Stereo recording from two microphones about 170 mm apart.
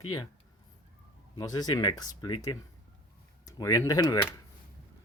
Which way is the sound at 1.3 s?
25° left (ahead or behind).